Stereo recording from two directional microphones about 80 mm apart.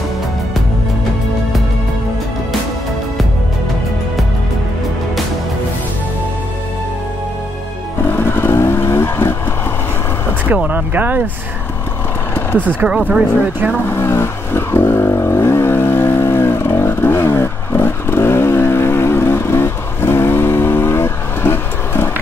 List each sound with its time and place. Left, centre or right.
8.2 s vehicle: left
10.5 s speech: right
12.5 s speech: centre
13.9 s vehicle: left